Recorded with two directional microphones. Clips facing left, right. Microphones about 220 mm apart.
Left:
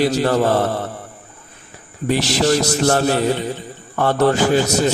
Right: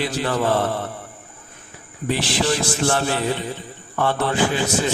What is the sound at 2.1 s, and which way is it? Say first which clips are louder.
Mantra: left 5 dB; 40° left (ahead or behind).